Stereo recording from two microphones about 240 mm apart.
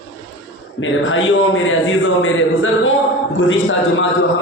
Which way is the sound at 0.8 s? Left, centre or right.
Left.